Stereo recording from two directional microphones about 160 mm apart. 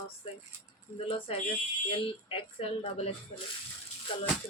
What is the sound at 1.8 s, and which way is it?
Speech, 35° left (ahead or behind).